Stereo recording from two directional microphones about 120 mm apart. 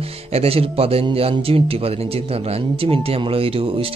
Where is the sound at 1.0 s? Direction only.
50° right (ahead or behind).